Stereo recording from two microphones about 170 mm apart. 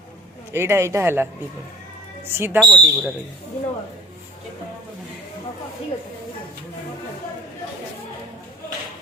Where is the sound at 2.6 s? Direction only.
Centre (ahead or behind).